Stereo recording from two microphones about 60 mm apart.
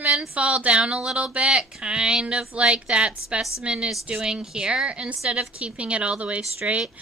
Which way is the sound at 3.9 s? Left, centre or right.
Centre.